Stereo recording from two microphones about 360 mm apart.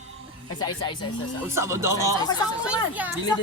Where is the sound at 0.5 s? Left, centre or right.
Centre.